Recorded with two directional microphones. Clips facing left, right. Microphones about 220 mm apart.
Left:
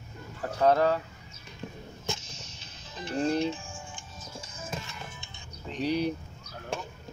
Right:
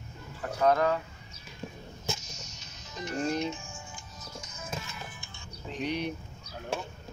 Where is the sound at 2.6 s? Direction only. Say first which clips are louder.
Right 1 dB; 30° left (ahead or behind).